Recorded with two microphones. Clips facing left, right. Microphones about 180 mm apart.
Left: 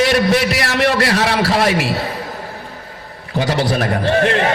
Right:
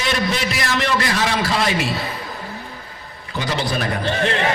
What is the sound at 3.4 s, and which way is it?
A man's voice, 60° left (ahead or behind).